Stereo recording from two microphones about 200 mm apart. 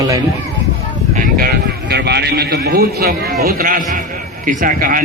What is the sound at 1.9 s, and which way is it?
A man's voice, 55° right (ahead or behind).